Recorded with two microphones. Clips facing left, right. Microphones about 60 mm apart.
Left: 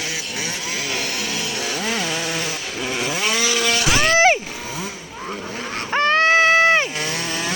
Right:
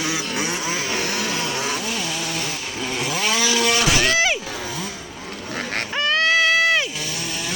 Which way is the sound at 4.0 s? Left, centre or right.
Left.